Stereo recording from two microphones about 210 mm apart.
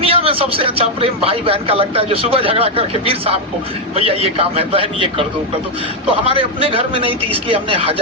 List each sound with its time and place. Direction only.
0.0 s a man's voice: 25° right (ahead or behind)
6.2 s a man's voice: 25° right (ahead or behind)